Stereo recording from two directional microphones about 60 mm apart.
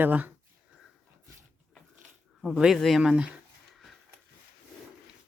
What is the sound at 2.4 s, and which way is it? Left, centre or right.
Speech, centre.